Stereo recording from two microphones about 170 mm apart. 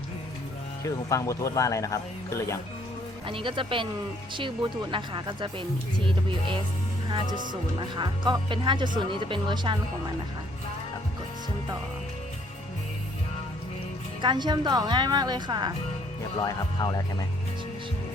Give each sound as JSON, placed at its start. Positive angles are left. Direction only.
{"t": 0.9, "sound": "speech", "side_deg": 20}
{"t": 3.2, "sound": "a woman's voice", "side_deg": -30}
{"t": 7.3, "sound": "speech", "side_deg": -50}
{"t": 7.8, "sound": "a woman's voice", "side_deg": -25}
{"t": 14.2, "sound": "a woman's voice", "side_deg": -25}
{"t": 16.4, "sound": "speech", "side_deg": 25}